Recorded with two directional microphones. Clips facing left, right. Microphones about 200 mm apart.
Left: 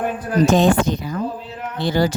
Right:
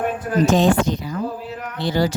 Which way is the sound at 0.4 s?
55° left (ahead or behind).